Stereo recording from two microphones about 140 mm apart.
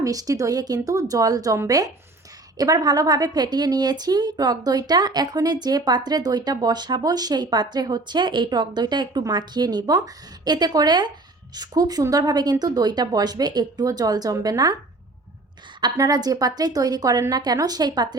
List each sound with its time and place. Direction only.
0.0 s speech: 25° right (ahead or behind)
15.8 s speech: 25° right (ahead or behind)